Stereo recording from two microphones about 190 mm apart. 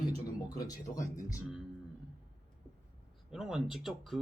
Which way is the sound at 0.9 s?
15° left (ahead or behind).